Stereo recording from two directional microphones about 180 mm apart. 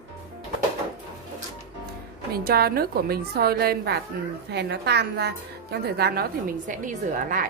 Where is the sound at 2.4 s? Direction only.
60° right (ahead or behind).